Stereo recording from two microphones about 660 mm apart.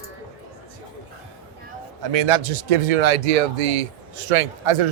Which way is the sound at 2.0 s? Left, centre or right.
Right.